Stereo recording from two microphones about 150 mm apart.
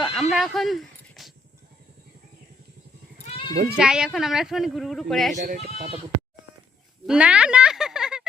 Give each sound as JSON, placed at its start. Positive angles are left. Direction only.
{"t": 0.0, "sound": "a sound", "side_deg": 0}
{"t": 3.2, "sound": "sheep", "side_deg": 35}
{"t": 3.5, "sound": "speech", "side_deg": -65}
{"t": 3.8, "sound": "a woman's voice", "side_deg": -5}
{"t": 5.4, "sound": "speech", "side_deg": -55}
{"t": 7.1, "sound": "speech", "side_deg": -5}